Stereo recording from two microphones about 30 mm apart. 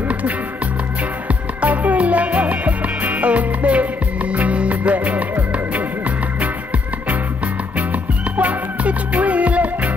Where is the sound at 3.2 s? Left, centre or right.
Right.